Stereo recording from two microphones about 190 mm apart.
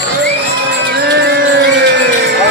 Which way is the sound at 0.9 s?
65° right (ahead or behind).